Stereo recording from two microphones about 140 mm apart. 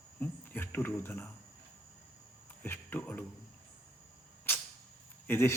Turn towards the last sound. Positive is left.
turn(degrees=20)  # may be behind; listen again after turning